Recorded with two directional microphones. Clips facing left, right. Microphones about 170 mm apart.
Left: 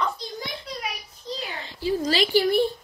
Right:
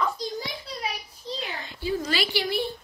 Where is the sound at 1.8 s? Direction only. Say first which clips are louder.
Left 4 dB; 35° left (ahead or behind).